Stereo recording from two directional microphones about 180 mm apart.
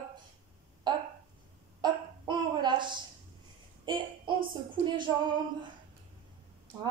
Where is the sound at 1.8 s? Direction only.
25° right (ahead or behind).